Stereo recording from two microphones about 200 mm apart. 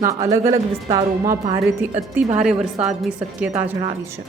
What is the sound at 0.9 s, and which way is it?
Speech, 20° right (ahead or behind).